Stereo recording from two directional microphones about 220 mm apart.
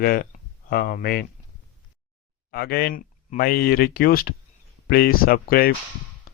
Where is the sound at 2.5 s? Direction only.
45° left (ahead or behind).